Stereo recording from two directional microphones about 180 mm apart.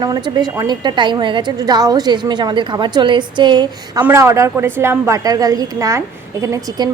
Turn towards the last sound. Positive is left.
turn(degrees=-15)  # may be behind; listen again after turning